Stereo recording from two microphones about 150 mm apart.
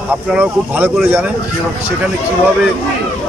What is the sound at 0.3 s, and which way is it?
Speech, 10° right (ahead or behind).